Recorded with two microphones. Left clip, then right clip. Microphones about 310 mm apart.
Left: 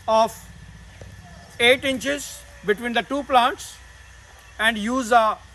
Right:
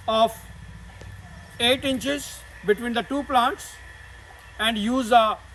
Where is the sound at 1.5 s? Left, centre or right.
Centre.